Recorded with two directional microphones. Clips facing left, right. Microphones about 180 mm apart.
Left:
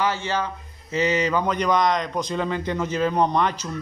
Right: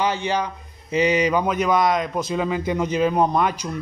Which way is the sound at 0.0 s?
15° right (ahead or behind).